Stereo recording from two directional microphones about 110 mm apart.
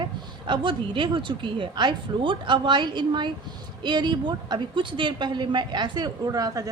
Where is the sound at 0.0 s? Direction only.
45° right (ahead or behind).